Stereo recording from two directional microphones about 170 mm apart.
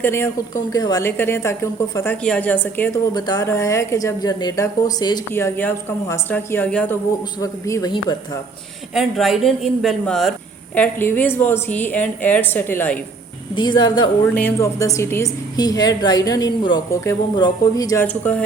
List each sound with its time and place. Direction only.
0.0 s a woman's voice: 15° left (ahead or behind)
3.2 s a woman's voice: 25° left (ahead or behind)
7.4 s a woman's voice: 20° left (ahead or behind)
9.0 s speech: centre (ahead or behind)
10.8 s a woman's voice: 10° left (ahead or behind)
13.6 s a woman's voice: 25° left (ahead or behind)
14.3 s a woman's voice: 15° left (ahead or behind)
18.0 s a woman's voice: 10° left (ahead or behind)